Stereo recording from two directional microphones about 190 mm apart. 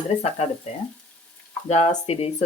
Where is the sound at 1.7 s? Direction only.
35° left (ahead or behind).